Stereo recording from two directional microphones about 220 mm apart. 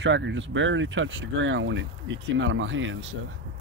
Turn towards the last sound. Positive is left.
turn(degrees=-60)  # may be behind; listen again after turning